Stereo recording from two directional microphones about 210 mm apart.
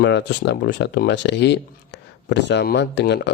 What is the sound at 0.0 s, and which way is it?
Speech, 55° left (ahead or behind).